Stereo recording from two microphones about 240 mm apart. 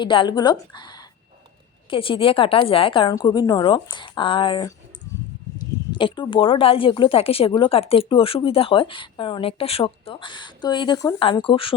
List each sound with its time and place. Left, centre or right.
0.0 s a woman's voice: centre
5.1 s a sound: centre
5.9 s speech: centre